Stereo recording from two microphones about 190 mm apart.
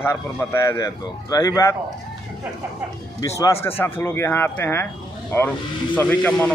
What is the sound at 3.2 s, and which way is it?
Speech, 15° left (ahead or behind).